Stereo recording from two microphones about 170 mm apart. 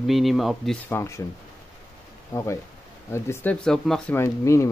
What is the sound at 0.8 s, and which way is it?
Speech, 15° left (ahead or behind).